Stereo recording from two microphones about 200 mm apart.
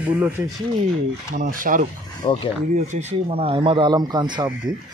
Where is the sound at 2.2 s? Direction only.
25° left (ahead or behind).